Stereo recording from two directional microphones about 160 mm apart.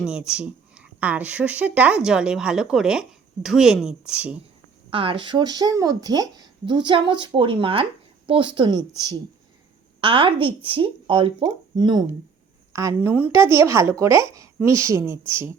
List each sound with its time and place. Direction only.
0.0 s speech: 5° right (ahead or behind)
4.9 s a woman's voice: 35° right (ahead or behind); by 15.5 s 15° right (ahead or behind)